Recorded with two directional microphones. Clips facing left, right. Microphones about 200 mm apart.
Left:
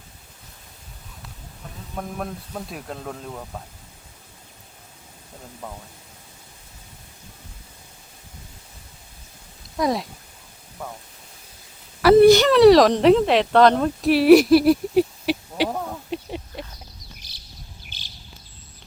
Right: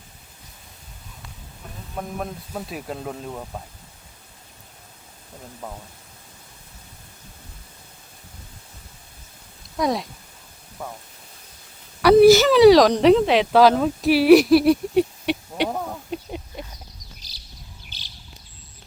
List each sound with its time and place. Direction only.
2.0 s speech: 5° right (ahead or behind)
9.7 s speech: centre (ahead or behind)
12.0 s a sound: centre (ahead or behind)
17.8 s chirp: 50° left (ahead or behind)